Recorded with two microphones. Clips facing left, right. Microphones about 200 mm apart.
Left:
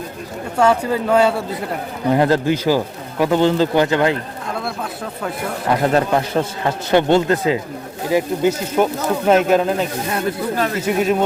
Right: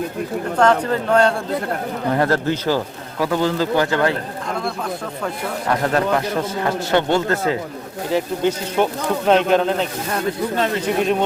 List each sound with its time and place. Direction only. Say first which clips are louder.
0.6 s speech: left 1 dB; 10° left (ahead or behind)
5.8 s speech: left 2 dB; 25° left (ahead or behind); by 11.2 s 5° left (ahead or behind)